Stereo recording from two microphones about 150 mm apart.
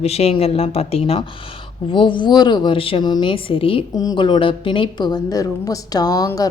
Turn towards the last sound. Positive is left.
turn(degrees=25)  # may be behind; listen again after turning